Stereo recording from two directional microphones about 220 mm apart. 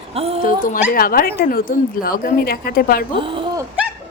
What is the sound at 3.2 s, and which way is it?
Speech, 25° right (ahead or behind).